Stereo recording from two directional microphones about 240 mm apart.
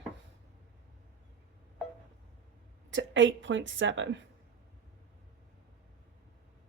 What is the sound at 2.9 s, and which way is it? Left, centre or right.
Speech, right.